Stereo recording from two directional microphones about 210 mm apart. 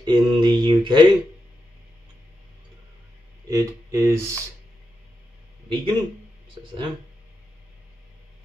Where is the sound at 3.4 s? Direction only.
15° right (ahead or behind).